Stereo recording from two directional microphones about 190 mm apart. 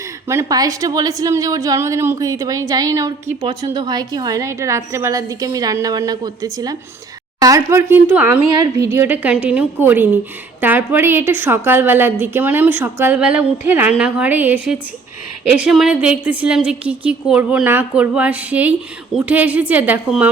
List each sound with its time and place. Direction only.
0.3 s a woman's voice: 15° right (ahead or behind)
8.4 s a woman's voice: 20° right (ahead or behind)